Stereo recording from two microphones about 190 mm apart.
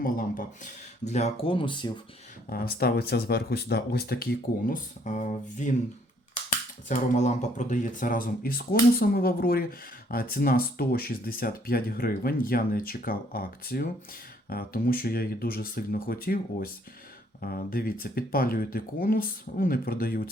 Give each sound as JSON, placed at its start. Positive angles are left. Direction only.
{"t": 0.0, "sound": "speech", "side_deg": 45}
{"t": 2.5, "sound": "speech", "side_deg": 55}
{"t": 6.8, "sound": "speech", "side_deg": 40}